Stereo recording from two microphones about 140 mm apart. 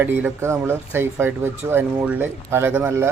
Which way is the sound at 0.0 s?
15° right (ahead or behind).